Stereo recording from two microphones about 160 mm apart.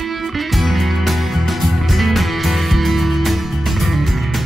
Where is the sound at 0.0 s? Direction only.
Centre (ahead or behind).